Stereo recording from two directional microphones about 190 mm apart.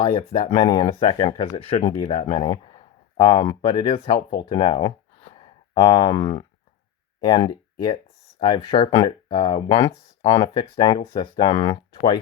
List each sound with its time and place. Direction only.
0.0 s speech: 30° left (ahead or behind)